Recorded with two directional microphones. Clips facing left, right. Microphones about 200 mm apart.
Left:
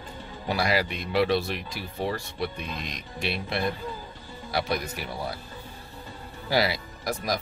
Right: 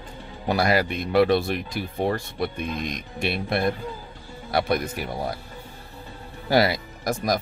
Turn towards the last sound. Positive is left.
turn(degrees=-45)  # may be behind; listen again after turning